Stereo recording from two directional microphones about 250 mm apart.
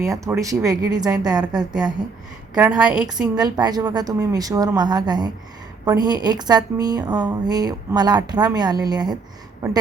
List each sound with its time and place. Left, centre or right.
0.0 s a woman's voice: centre
2.6 s a woman's voice: centre
3.3 s a woman's voice: centre